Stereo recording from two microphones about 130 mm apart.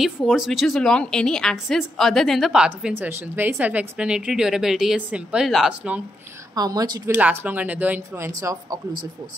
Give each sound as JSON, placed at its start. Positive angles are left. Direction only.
{"t": 0.0, "sound": "a woman's voice", "side_deg": -5}
{"t": 6.5, "sound": "speech", "side_deg": -30}
{"t": 7.1, "sound": "speech", "side_deg": -10}
{"t": 8.3, "sound": "speech", "side_deg": -25}